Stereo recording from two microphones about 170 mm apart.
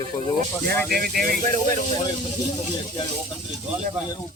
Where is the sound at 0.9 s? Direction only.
60° right (ahead or behind).